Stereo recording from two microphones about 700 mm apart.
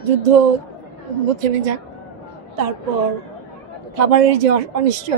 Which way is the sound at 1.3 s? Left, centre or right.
Right.